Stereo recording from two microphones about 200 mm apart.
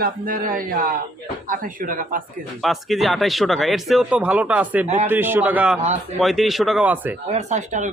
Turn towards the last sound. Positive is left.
turn(degrees=-35)  # may be behind; listen again after turning